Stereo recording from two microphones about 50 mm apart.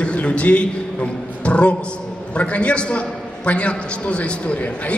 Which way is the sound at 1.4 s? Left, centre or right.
Left.